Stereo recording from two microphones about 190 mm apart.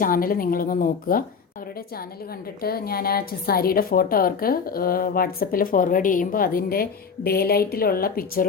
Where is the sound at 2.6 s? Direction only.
55° left (ahead or behind).